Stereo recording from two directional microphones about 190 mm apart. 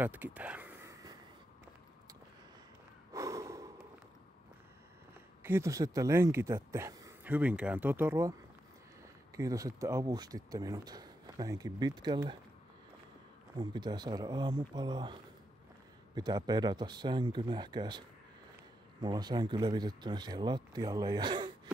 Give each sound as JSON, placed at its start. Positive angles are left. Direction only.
{"t": 0.0, "sound": "a sound", "side_deg": -10}
{"t": 3.1, "sound": "snort", "side_deg": -15}
{"t": 5.4, "sound": "speech", "side_deg": -15}
{"t": 9.4, "sound": "speech", "side_deg": -20}
{"t": 13.6, "sound": "speech", "side_deg": -25}
{"t": 16.2, "sound": "speech", "side_deg": -20}